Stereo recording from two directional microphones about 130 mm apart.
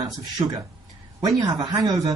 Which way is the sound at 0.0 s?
35° right (ahead or behind).